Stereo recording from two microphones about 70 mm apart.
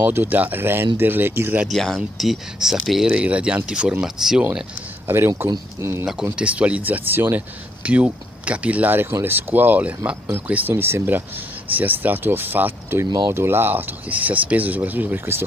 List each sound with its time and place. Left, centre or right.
0.0 s speech: right
1.7 s speech: centre
3.2 s speech: centre
5.0 s speech: right
6.3 s speech: centre
7.8 s speech: centre
10.2 s speech: right